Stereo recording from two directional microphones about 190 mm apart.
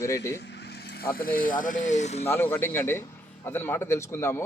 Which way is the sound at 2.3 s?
10° left (ahead or behind).